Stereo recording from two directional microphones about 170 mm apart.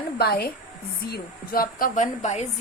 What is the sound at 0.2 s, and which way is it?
A woman's voice, 65° left (ahead or behind).